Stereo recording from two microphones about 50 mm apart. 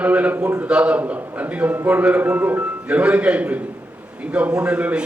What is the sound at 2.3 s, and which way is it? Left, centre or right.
Speech, right.